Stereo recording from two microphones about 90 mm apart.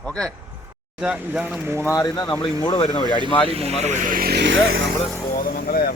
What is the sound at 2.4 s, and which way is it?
Speech, 70° left (ahead or behind).